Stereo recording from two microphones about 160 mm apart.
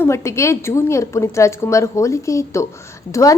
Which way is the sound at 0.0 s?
15° left (ahead or behind).